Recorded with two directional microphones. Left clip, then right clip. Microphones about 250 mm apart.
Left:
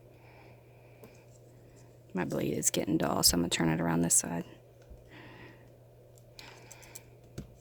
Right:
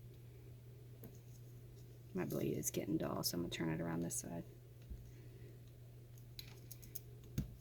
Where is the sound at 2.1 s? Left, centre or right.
Left.